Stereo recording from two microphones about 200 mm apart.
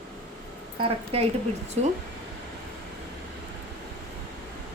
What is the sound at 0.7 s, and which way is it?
Speech, 30° right (ahead or behind).